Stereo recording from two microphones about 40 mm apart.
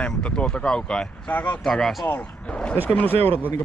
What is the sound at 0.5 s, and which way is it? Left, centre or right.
Speech, left.